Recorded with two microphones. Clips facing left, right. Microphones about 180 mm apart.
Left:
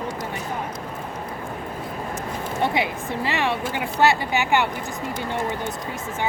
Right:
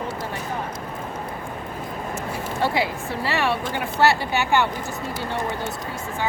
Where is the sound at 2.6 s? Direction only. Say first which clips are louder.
Even; 20° left (ahead or behind).